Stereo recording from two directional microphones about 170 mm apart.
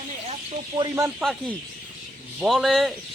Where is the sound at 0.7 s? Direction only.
20° right (ahead or behind).